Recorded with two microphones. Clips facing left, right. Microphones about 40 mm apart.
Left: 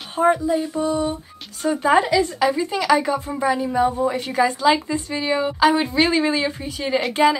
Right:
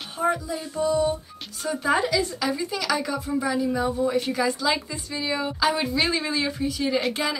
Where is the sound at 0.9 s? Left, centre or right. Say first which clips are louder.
Even; left.